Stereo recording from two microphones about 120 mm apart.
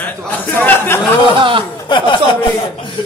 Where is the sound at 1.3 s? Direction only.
45° right (ahead or behind).